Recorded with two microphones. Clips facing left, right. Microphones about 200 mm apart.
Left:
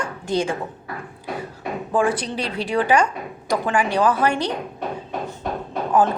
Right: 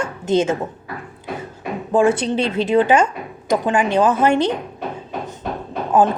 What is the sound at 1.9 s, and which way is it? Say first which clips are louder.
A woman's voice: right 6 dB; 25° right (ahead or behind).